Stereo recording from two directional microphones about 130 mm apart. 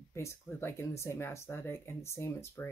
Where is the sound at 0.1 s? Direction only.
20° left (ahead or behind).